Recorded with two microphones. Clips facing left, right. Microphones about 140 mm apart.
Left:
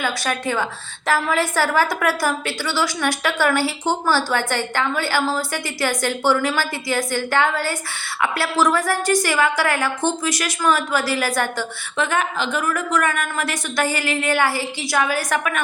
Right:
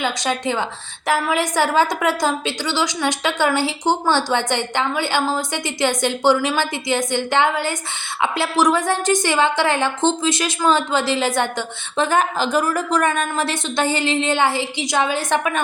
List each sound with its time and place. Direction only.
0.0 s a woman's voice: 20° right (ahead or behind)